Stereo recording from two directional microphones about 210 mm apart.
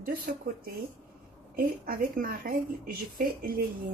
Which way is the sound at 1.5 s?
45° right (ahead or behind).